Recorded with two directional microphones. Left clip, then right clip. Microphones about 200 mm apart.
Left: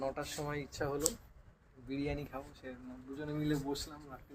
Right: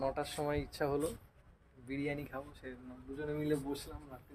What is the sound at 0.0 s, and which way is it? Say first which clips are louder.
Speech: right 3 dB; 20° right (ahead or behind).